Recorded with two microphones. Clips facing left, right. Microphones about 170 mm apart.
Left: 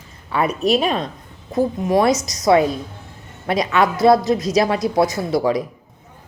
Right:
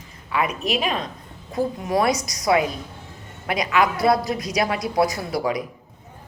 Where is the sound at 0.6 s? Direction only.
35° left (ahead or behind).